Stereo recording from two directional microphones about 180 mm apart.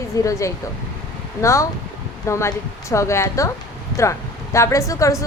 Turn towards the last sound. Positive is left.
turn(degrees=15)  # may be behind; listen again after turning